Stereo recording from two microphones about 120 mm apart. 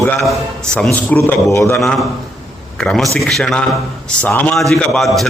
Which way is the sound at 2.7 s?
5° left (ahead or behind).